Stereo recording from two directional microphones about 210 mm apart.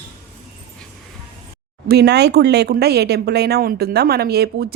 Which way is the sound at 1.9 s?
50° right (ahead or behind).